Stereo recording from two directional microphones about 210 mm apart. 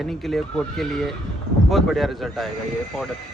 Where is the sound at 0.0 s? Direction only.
Centre (ahead or behind).